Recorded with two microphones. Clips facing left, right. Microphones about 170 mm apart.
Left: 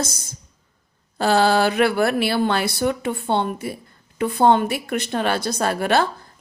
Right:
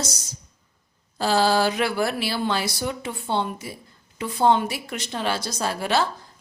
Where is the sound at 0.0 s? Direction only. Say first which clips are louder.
Left 4 dB; 55° left (ahead or behind).